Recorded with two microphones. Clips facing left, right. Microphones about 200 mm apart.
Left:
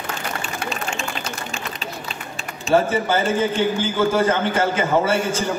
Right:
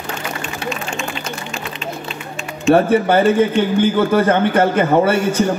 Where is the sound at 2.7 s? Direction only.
60° right (ahead or behind).